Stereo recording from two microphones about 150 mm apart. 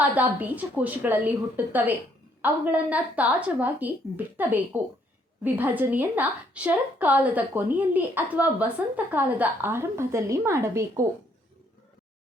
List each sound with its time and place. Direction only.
0.0 s a woman's voice: 10° right (ahead or behind)